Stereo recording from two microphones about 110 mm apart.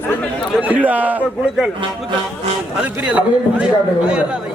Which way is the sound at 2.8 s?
10° right (ahead or behind).